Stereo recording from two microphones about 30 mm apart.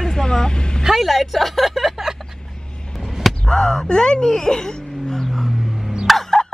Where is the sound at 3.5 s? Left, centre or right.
Left.